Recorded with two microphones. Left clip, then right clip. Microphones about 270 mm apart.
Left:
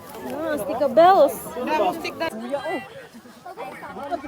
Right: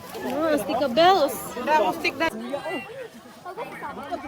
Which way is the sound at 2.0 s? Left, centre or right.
Right.